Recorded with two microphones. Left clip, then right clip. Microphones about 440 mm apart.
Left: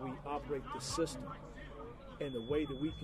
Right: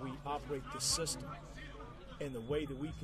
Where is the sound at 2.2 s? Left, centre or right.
Right.